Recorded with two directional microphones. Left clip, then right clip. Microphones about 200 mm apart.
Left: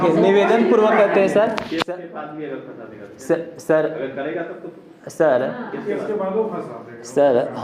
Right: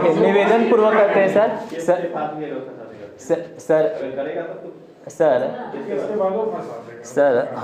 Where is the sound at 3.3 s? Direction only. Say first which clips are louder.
Even; 5° left (ahead or behind).